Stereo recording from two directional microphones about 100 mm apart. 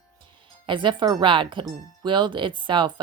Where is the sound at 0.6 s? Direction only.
55° right (ahead or behind).